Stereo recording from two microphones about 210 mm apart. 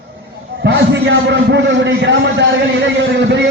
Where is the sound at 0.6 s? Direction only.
55° right (ahead or behind).